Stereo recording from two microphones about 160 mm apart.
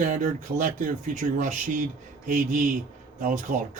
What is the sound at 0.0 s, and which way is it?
Speech, 55° right (ahead or behind).